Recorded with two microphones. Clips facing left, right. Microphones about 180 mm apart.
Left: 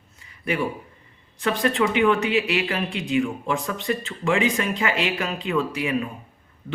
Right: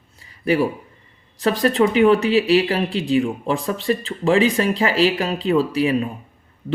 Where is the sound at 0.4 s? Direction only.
35° right (ahead or behind).